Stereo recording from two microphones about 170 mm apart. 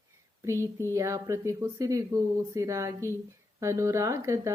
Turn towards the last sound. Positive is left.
turn(degrees=-15)  # may be behind; listen again after turning